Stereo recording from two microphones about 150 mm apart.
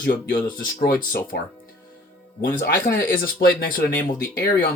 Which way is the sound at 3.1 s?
85° left.